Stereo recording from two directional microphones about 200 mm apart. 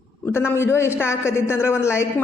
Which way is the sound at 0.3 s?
10° left (ahead or behind).